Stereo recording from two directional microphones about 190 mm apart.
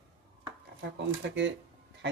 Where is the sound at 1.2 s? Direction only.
70° right (ahead or behind).